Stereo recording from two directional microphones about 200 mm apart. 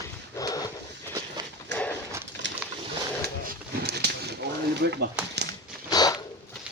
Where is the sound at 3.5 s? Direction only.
50° right (ahead or behind).